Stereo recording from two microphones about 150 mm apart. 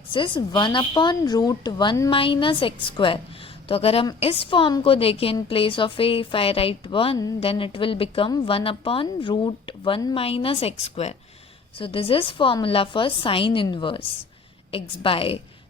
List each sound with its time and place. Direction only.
0.1 s speech: 35° left (ahead or behind)
15.0 s speech: 40° left (ahead or behind)